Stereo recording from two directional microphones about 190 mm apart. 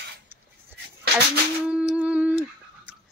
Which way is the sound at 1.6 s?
5° right (ahead or behind).